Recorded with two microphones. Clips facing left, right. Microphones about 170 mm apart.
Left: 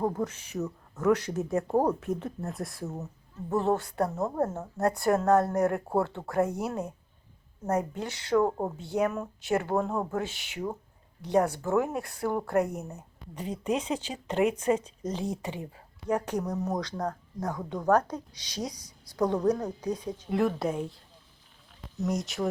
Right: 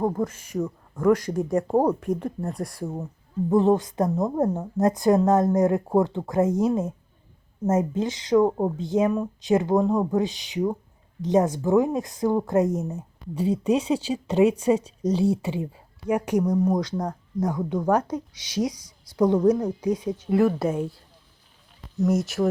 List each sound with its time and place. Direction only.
0.2 s speech: 10° right (ahead or behind)
13.1 s a woman's voice: 10° right (ahead or behind)
21.9 s speech: centre (ahead or behind)